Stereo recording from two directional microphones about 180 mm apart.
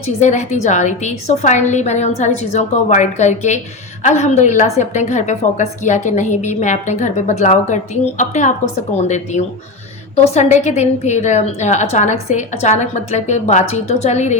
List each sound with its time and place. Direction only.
0.2 s a woman's voice: 40° left (ahead or behind)